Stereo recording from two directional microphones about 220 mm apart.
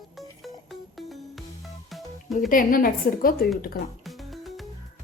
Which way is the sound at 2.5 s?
40° left (ahead or behind).